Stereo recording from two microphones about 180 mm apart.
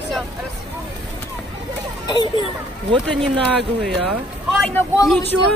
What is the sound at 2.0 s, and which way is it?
Speech, 25° left (ahead or behind).